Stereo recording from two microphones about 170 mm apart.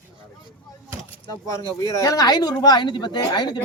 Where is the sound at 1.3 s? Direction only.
20° left (ahead or behind).